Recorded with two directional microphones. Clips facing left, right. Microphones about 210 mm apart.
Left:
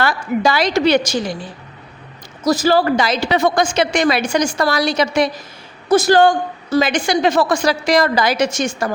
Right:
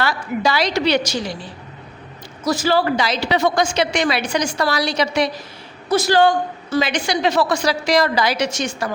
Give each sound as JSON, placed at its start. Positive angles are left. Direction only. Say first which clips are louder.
{"t": 0.0, "sound": "a woman's voice", "louder": "left 3 dB", "side_deg": 50}
{"t": 2.4, "sound": "a woman's voice", "louder": "left 3 dB", "side_deg": 40}